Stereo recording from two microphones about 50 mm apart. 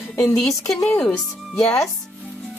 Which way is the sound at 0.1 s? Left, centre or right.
Left.